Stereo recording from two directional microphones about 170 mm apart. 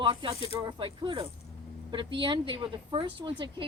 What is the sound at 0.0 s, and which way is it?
Speech, 30° right (ahead or behind).